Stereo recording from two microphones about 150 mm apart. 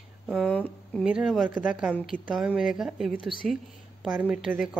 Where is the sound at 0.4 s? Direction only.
10° left (ahead or behind).